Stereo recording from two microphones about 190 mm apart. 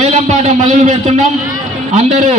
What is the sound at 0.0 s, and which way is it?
A man's voice, 35° right (ahead or behind).